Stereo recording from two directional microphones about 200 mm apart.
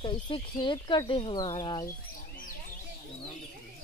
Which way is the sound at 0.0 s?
25° left (ahead or behind).